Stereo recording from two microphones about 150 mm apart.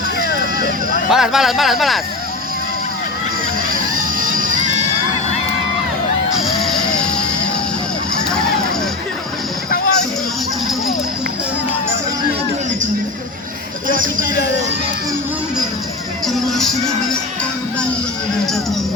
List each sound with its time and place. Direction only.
1.1 s speech: centre (ahead or behind)
4.2 s music: 60° right (ahead or behind)
6.6 s music: centre (ahead or behind)
9.6 s music: 75° left (ahead or behind)
13.9 s speech: 65° right (ahead or behind)
16.2 s speech: centre (ahead or behind)